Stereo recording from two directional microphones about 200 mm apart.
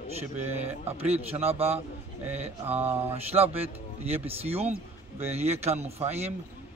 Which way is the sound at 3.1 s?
30° right (ahead or behind).